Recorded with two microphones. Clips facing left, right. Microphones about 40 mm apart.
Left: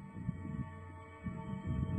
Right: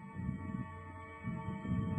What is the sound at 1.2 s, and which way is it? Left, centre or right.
Music, centre.